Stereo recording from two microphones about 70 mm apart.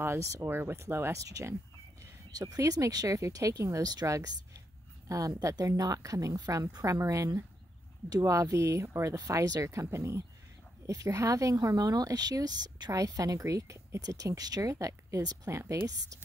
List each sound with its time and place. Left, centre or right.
0.2 s speech: right
0.5 s speech: right
2.3 s speech: right
6.8 s speech: right
10.9 s speech: right
12.9 s speech: right